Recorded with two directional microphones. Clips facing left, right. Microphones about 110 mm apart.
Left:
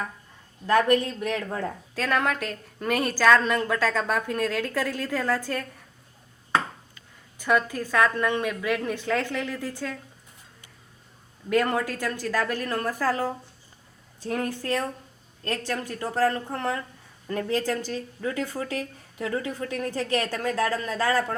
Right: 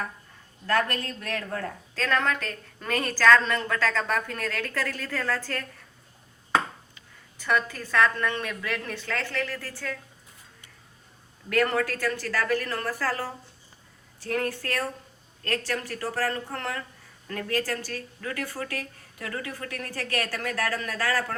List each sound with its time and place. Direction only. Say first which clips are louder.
0.7 s speech: left 6 dB; 15° left (ahead or behind)
7.3 s speech: left 3 dB; 15° left (ahead or behind)
11.4 s speech: left 1 dB; 15° left (ahead or behind)